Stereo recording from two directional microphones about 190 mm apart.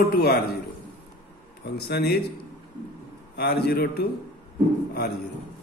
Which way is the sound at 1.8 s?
60° left (ahead or behind).